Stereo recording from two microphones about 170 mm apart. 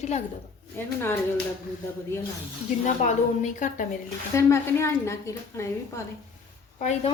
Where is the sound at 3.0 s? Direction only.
45° left (ahead or behind).